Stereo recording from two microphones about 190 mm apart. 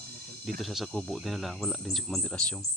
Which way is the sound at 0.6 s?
Centre (ahead or behind).